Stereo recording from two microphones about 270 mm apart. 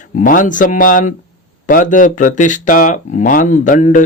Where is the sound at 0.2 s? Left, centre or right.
Left.